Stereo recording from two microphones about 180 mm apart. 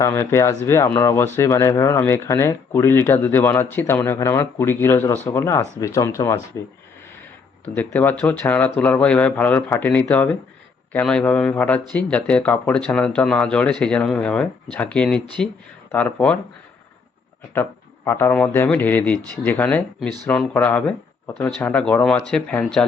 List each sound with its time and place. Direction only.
0.0 s speech: 15° left (ahead or behind)
7.8 s speech: 10° left (ahead or behind)
17.5 s speech: 10° left (ahead or behind)